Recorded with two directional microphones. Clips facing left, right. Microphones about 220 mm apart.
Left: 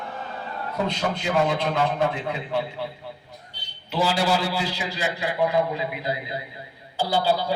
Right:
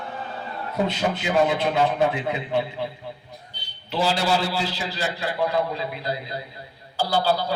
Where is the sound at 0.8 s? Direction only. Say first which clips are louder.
Right 1 dB; 5° right (ahead or behind).